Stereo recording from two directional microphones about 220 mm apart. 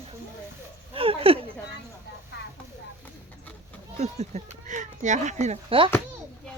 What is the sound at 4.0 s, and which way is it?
Speech, 30° right (ahead or behind).